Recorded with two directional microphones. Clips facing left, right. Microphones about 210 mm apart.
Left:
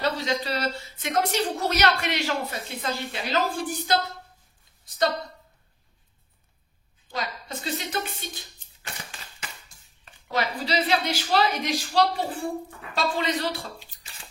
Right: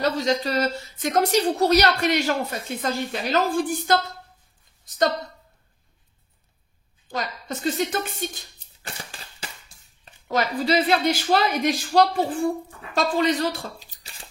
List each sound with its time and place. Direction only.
0.0 s a woman's voice: 45° right (ahead or behind)
7.1 s speech: 50° right (ahead or behind)
10.2 s a woman's voice: 50° right (ahead or behind)